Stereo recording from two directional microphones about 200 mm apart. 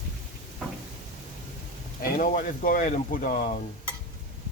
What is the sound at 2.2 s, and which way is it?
Speech, 45° left (ahead or behind).